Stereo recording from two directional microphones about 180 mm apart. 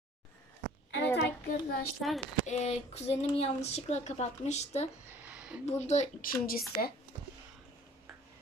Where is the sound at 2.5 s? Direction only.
40° left (ahead or behind).